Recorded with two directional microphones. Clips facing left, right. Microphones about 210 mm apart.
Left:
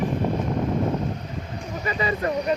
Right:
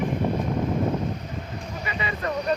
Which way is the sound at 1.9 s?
40° left (ahead or behind).